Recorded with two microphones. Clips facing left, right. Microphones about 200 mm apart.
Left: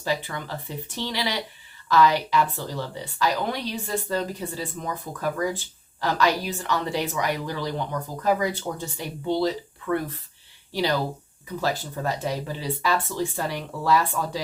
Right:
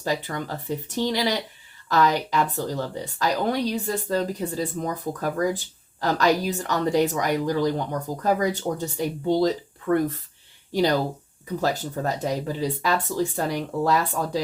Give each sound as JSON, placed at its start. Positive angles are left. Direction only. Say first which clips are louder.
{"t": 0.0, "sound": "a woman's voice", "louder": "right 1 dB", "side_deg": -45}